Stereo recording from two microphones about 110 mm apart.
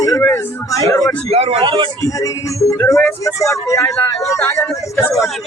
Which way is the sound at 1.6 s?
45° right (ahead or behind).